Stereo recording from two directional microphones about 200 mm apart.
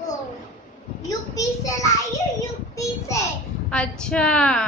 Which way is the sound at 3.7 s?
5° left (ahead or behind).